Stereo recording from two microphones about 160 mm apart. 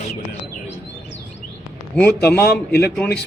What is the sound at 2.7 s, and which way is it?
Speech, 85° left.